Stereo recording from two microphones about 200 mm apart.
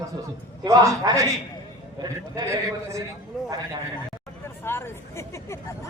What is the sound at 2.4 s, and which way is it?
Speech, 15° right (ahead or behind).